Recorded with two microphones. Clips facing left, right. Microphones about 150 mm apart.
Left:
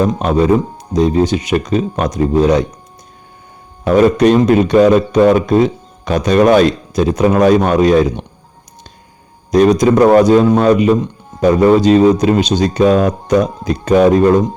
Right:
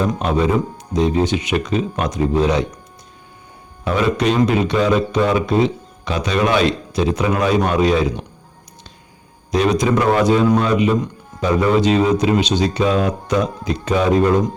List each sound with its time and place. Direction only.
0.2 s speech: 40° left (ahead or behind)
3.8 s speech: 45° left (ahead or behind)
9.5 s speech: 40° left (ahead or behind)